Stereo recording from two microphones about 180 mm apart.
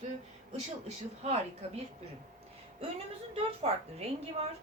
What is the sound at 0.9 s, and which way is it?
Speech, 35° right (ahead or behind).